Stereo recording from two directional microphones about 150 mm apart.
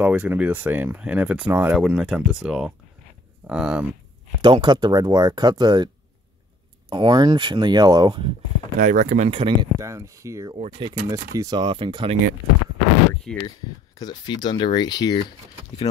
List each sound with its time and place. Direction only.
0.0 s speech: 10° right (ahead or behind)
4.4 s speech: 30° right (ahead or behind)
6.9 s speech: 30° right (ahead or behind)
8.7 s speech: 60° right (ahead or behind)
9.3 s speech: 35° right (ahead or behind)
9.8 s speech: 20° right (ahead or behind)
10.5 s speech: 40° right (ahead or behind)
10.9 s speech: 25° right (ahead or behind)
13.4 s speech: 25° left (ahead or behind)